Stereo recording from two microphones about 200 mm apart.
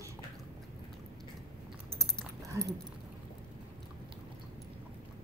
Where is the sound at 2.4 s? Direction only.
15° right (ahead or behind).